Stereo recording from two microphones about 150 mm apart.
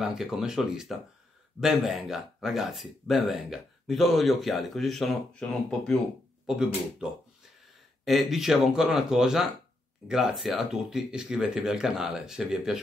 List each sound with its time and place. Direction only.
0.0 s speech: 5° right (ahead or behind)